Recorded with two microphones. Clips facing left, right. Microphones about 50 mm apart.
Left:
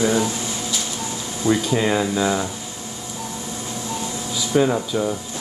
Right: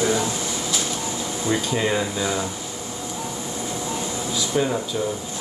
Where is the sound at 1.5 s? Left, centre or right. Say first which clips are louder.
Left 3 dB; centre.